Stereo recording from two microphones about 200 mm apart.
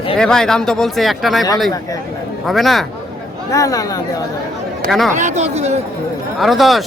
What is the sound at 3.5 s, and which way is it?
Speech, 15° left (ahead or behind).